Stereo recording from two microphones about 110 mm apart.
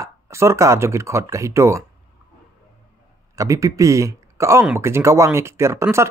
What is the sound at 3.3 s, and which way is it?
Speech, 30° right (ahead or behind).